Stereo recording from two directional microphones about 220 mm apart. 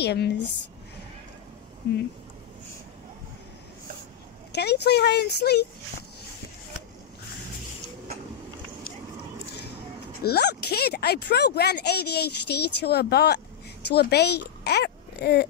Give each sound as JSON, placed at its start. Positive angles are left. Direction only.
{"t": 0.0, "sound": "speech", "side_deg": 50}
{"t": 4.5, "sound": "speech", "side_deg": 50}
{"t": 10.2, "sound": "speech", "side_deg": 50}